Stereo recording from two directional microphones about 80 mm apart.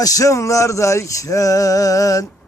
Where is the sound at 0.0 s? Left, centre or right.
Left.